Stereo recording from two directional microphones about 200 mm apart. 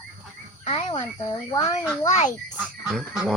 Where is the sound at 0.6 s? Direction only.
30° left (ahead or behind).